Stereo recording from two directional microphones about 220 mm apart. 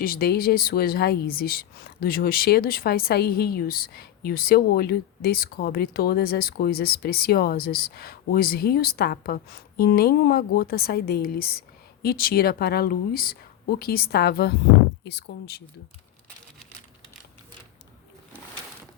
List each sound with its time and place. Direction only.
0.0 s a woman's voice: 40° left (ahead or behind)